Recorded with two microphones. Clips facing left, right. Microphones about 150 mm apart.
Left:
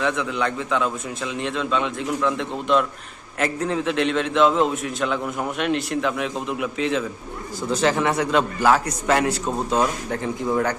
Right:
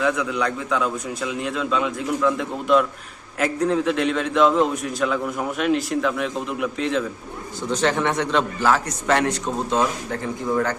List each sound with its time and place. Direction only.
0.0 s a man's voice: centre (ahead or behind); by 10.8 s 15° left (ahead or behind)